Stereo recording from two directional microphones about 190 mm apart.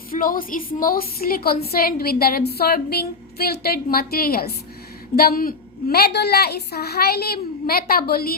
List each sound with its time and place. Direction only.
0.1 s a woman's voice: 45° left (ahead or behind)